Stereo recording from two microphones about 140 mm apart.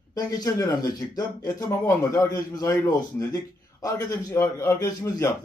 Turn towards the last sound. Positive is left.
turn(degrees=20)  # may be behind; listen again after turning